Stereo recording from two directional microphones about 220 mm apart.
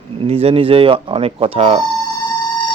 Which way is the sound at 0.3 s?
25° right (ahead or behind).